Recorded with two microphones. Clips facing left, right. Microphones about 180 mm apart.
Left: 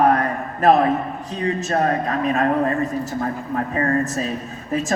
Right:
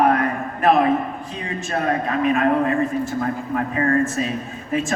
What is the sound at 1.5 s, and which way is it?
Speech, 40° left (ahead or behind).